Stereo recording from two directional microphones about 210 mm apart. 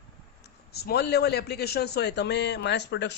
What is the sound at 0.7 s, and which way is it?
A man's voice, 50° left (ahead or behind).